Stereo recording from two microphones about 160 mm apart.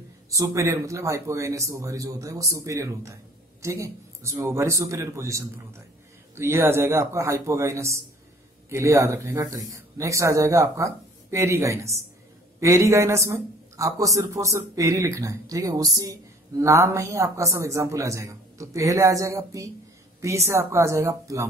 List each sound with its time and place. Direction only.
0.3 s a man's voice: 20° right (ahead or behind)